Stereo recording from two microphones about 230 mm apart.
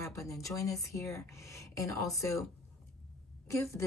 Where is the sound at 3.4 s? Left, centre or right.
Centre.